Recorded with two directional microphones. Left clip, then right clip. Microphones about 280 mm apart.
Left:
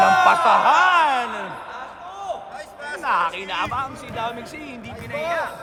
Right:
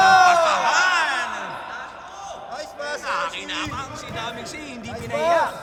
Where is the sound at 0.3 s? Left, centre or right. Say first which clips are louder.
Left 2 dB; centre.